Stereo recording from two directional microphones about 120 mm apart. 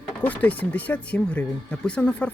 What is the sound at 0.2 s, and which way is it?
Speech, 15° left (ahead or behind).